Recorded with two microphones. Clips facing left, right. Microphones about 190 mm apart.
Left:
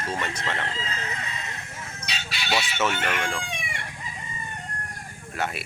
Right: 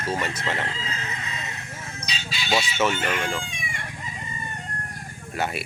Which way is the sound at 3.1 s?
5° right (ahead or behind).